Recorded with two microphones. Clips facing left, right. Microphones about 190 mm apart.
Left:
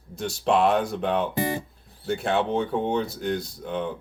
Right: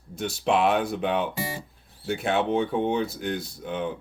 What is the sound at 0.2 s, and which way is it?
Speech, 5° right (ahead or behind).